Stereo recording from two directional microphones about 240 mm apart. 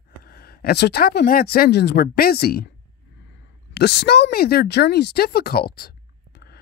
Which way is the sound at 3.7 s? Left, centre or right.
Left.